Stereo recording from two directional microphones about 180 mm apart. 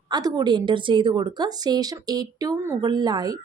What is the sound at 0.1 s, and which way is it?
A woman's voice, 20° right (ahead or behind).